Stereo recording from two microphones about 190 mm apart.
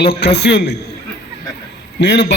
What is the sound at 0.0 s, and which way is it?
Speech, 60° left (ahead or behind).